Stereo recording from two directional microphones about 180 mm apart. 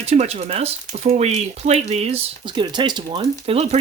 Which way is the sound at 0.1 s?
35° right (ahead or behind).